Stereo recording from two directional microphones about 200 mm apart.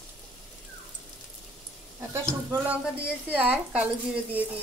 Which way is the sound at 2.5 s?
5° right (ahead or behind).